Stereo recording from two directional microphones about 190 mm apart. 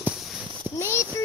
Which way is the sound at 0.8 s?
15° left (ahead or behind).